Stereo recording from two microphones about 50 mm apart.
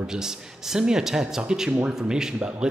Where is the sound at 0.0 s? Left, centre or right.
Centre.